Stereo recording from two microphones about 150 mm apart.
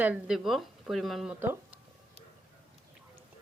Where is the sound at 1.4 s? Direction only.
15° right (ahead or behind).